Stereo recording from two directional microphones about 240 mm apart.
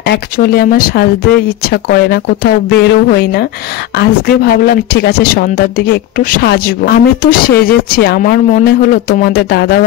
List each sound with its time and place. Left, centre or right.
0.0 s speech: left